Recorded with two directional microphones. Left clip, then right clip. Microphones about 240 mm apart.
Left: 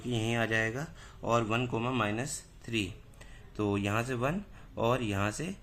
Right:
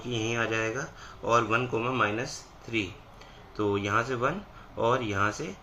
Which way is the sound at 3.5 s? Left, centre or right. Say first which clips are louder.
Right 5 dB; left.